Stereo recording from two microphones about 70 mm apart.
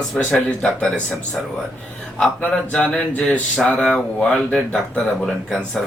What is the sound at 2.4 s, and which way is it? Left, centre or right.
Speech, centre.